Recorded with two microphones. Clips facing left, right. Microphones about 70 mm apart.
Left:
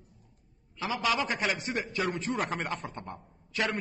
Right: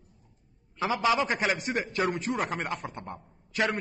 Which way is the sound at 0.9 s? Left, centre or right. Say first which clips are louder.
Right 3 dB; right.